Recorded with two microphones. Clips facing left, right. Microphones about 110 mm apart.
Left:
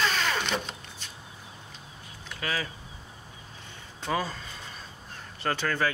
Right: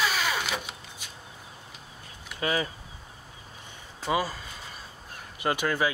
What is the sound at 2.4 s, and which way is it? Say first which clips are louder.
Speech: right 4 dB; 20° right (ahead or behind).